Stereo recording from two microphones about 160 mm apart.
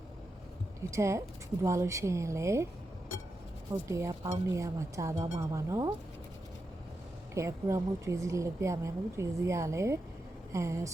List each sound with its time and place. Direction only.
0.9 s speech: 20° right (ahead or behind)
3.8 s a woman's voice: 20° right (ahead or behind)
7.3 s a woman's voice: 20° right (ahead or behind)